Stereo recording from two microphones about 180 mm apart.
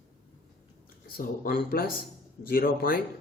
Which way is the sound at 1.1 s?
60° left (ahead or behind).